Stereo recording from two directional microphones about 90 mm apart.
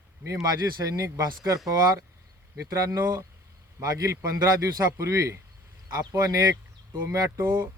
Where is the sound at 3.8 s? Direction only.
40° right (ahead or behind).